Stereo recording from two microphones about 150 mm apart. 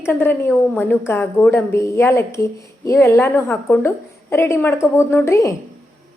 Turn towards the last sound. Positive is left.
turn(degrees=20)  # may be behind; listen again after turning